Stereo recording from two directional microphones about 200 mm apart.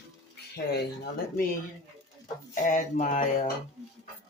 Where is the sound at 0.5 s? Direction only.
55° left (ahead or behind).